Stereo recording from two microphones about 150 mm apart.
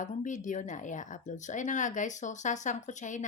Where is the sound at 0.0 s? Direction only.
55° left (ahead or behind).